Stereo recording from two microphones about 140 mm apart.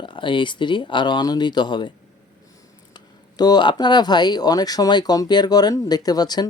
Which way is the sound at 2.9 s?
30° left (ahead or behind).